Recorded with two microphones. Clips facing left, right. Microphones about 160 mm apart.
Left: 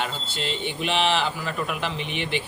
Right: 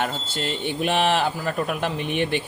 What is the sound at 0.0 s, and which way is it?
Speech, 50° right (ahead or behind).